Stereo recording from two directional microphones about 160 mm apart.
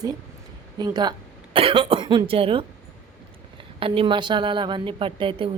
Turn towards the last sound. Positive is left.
turn(degrees=-35)  # may be behind; listen again after turning